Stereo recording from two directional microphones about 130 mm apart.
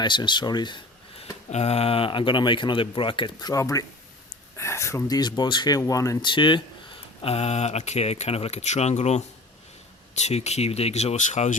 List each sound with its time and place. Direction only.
0.0 s speech: 35° left (ahead or behind)
3.5 s speech: 25° left (ahead or behind)
6.3 s speech: 40° left (ahead or behind); by 11.5 s 60° left (ahead or behind)